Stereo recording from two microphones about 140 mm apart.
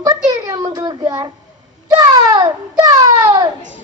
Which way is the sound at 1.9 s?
30° right (ahead or behind).